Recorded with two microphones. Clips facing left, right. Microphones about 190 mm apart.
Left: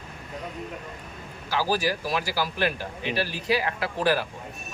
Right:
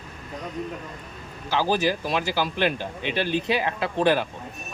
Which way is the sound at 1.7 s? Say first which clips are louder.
Right 2 dB; 20° right (ahead or behind).